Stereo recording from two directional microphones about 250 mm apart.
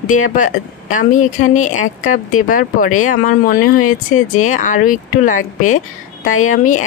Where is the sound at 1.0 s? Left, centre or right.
Left.